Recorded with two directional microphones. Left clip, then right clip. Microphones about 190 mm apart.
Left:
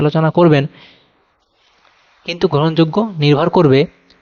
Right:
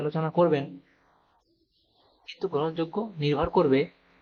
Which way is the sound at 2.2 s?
50° left (ahead or behind).